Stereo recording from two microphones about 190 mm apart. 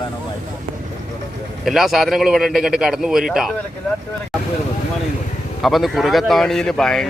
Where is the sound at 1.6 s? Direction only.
Centre (ahead or behind).